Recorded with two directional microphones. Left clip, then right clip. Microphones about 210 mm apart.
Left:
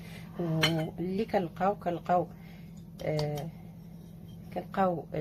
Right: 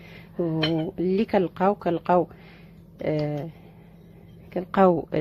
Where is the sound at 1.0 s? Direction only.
45° right (ahead or behind).